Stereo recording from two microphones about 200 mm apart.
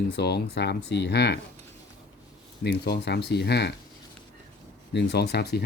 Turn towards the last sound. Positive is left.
turn(degrees=55)  # may be behind; listen again after turning